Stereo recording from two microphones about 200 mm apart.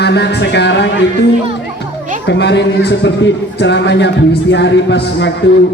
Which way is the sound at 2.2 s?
60° left (ahead or behind).